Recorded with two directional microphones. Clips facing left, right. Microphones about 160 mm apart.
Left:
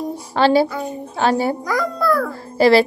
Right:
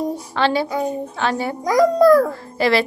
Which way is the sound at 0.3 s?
35° left (ahead or behind).